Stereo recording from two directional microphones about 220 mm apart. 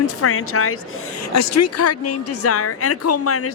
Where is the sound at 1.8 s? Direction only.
90° left.